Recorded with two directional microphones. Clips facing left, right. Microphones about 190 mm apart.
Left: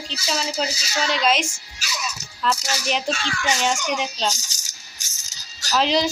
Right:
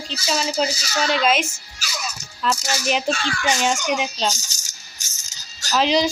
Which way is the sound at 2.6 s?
45° right (ahead or behind).